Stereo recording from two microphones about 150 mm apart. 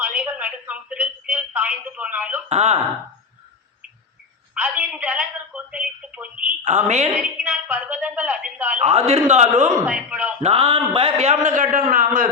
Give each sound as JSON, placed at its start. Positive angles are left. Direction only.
{"t": 0.0, "sound": "a woman's voice", "side_deg": -10}
{"t": 2.5, "sound": "a man's voice", "side_deg": -45}
{"t": 4.5, "sound": "telephone", "side_deg": -10}
{"t": 6.7, "sound": "a man's voice", "side_deg": -50}
{"t": 7.1, "sound": "a woman's voice", "side_deg": -10}
{"t": 8.8, "sound": "a man's voice", "side_deg": -45}
{"t": 9.8, "sound": "a woman's voice", "side_deg": -10}
{"t": 10.4, "sound": "a man's voice", "side_deg": -40}